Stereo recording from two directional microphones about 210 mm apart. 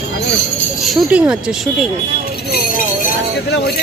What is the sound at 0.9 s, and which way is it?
Speech, 5° right (ahead or behind).